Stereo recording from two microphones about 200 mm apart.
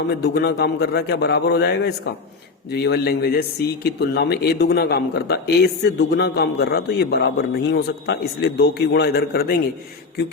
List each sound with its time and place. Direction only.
0.2 s a man's voice: 55° left (ahead or behind)